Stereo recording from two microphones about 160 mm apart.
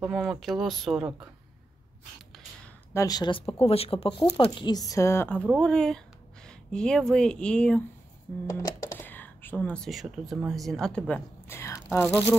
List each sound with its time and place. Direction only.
0.0 s speech: centre (ahead or behind)
2.9 s speech: 20° left (ahead or behind); by 7.8 s 5° left (ahead or behind)
8.5 s speech: 20° left (ahead or behind)